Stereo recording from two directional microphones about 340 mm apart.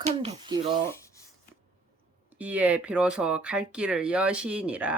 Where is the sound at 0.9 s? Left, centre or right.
Centre.